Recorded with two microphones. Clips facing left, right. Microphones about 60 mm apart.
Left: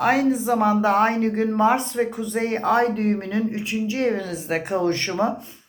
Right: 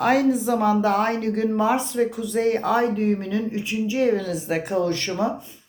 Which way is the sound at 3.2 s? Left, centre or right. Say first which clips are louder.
Left 1 dB; centre.